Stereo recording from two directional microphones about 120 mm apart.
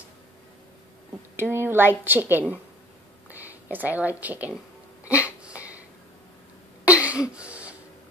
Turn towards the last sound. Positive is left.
turn(degrees=-10)  # may be behind; listen again after turning